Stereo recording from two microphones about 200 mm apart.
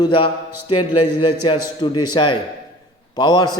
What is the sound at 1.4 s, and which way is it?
A man's voice, 25° left (ahead or behind).